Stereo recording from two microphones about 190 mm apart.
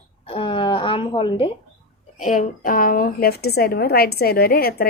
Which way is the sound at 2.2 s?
45° left (ahead or behind).